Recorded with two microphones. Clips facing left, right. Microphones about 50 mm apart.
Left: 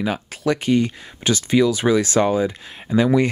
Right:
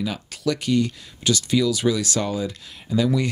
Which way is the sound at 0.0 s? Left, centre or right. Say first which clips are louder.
Left 3 dB; left.